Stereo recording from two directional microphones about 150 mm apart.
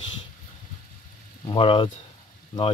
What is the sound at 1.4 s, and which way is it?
Speech, 35° left (ahead or behind).